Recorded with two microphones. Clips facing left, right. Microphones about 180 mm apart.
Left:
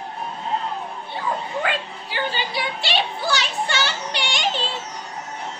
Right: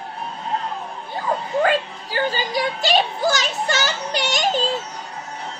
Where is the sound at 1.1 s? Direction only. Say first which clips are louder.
Right 5 dB; 40° right (ahead or behind).